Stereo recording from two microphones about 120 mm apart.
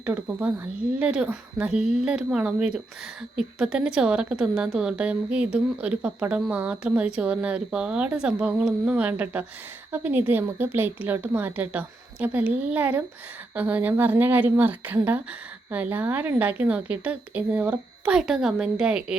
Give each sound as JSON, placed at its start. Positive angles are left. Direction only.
{"t": 0.0, "sound": "a woman's voice", "side_deg": -15}